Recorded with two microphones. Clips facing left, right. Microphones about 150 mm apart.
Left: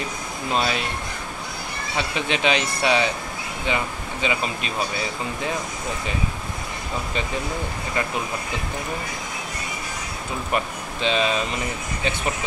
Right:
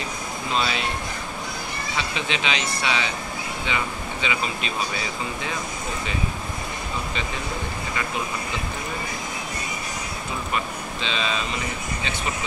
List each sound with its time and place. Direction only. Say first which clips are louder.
0.6 s speech: left 2 dB; 50° left (ahead or behind)
2.1 s speech: left 6 dB; 50° left (ahead or behind)
11.0 s speech: left 7 dB; 50° left (ahead or behind)